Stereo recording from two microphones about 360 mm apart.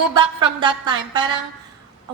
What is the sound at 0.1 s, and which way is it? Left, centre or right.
A woman's voice, centre.